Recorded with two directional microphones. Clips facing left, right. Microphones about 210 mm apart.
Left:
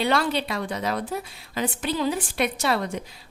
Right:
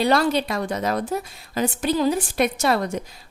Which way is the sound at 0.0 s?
40° right (ahead or behind).